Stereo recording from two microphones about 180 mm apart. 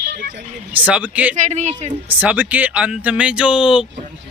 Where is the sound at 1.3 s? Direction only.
40° right (ahead or behind).